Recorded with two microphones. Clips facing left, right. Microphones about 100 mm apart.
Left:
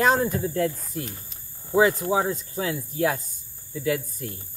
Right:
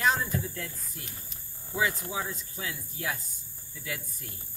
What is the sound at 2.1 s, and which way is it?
Speech, 50° left (ahead or behind).